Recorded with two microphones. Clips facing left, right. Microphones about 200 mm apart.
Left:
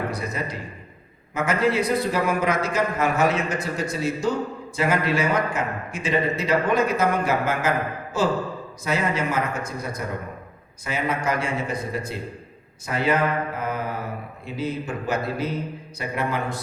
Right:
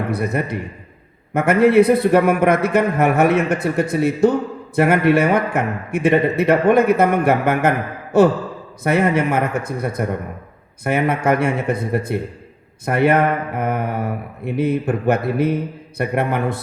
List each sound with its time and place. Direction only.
0.1 s a man's voice: 60° right (ahead or behind)